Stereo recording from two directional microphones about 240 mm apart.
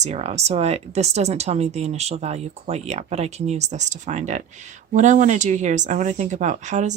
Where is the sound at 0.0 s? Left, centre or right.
Right.